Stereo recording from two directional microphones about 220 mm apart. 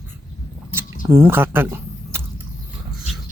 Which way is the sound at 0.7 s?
10° right (ahead or behind).